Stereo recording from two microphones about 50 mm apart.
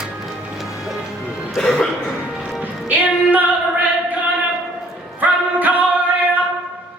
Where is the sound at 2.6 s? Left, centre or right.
Right.